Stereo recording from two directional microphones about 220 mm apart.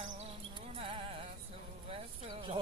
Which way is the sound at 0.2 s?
25° right (ahead or behind).